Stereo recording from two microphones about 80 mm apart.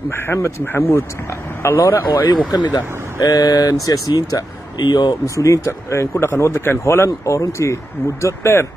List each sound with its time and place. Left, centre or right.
0.1 s a man's voice: left
2.1 s speech: left
5.2 s a man's voice: left